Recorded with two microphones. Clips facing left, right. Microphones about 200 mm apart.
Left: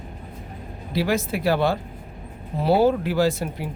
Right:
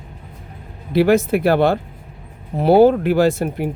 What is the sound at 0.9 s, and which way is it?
Speech, 55° right (ahead or behind).